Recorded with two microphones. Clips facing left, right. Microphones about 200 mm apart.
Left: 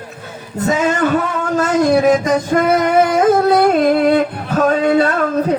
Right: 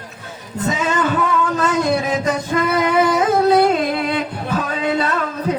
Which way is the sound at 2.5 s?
55° left (ahead or behind).